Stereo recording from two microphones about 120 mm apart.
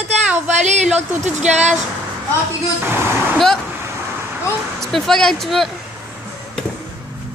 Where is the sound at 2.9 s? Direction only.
20° right (ahead or behind).